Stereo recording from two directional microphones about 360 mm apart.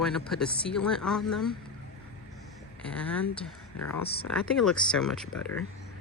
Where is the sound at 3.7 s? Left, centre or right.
Left.